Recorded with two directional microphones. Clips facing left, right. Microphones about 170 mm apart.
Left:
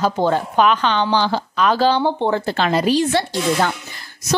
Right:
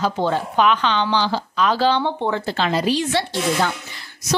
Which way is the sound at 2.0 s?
35° left (ahead or behind).